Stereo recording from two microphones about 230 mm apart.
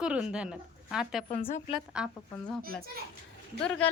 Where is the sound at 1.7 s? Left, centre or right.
Centre.